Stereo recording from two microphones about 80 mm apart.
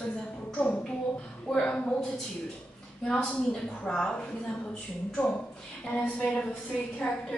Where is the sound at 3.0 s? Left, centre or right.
Centre.